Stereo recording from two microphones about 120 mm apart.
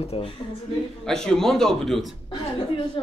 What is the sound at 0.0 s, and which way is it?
Speech, 60° left (ahead or behind).